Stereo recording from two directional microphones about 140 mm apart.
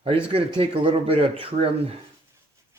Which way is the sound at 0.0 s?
40° right (ahead or behind).